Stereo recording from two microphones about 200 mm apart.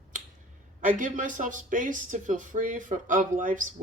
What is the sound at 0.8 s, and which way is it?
Speech, 40° right (ahead or behind).